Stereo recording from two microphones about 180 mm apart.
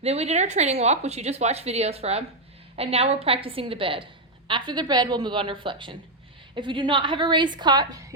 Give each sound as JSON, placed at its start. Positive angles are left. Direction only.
{"t": 0.0, "sound": "a woman's voice", "side_deg": -35}